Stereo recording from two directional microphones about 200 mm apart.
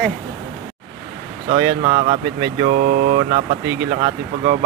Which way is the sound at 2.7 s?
45° right (ahead or behind).